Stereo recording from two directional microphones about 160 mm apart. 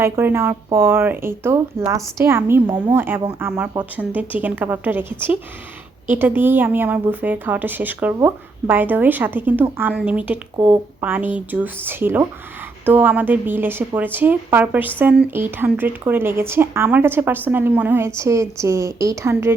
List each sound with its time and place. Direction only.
0.0 s a woman's voice: 15° right (ahead or behind)